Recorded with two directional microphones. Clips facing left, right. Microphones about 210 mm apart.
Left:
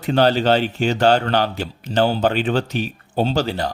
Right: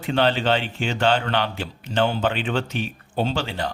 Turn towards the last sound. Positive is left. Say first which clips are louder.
# left 5 dB
turn(degrees=40)  # may be behind; listen again after turning